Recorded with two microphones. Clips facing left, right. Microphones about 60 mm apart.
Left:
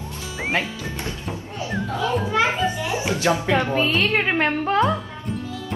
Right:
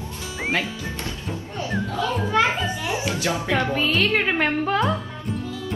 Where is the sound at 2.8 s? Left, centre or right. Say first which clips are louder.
Left 3 dB; left.